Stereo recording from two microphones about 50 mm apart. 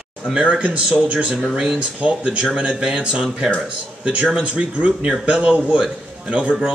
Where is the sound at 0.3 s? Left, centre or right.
Right.